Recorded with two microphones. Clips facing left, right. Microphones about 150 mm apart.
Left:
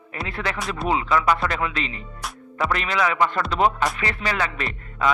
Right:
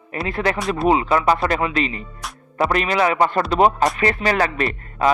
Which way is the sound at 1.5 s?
50° right (ahead or behind).